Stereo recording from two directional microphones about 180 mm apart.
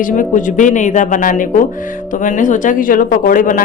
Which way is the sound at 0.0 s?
45° left (ahead or behind).